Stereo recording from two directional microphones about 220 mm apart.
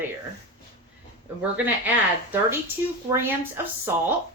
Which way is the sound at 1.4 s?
10° right (ahead or behind).